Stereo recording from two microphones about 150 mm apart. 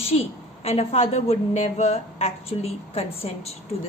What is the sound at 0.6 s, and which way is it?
A woman's voice, 45° left (ahead or behind).